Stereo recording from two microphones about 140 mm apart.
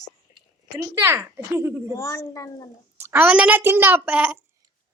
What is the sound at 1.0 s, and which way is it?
Speech, 20° right (ahead or behind).